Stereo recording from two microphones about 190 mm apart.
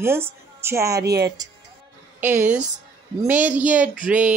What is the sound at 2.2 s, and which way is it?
A woman's voice, 10° right (ahead or behind).